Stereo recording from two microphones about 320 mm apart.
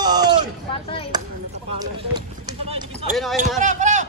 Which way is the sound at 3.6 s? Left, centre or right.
Right.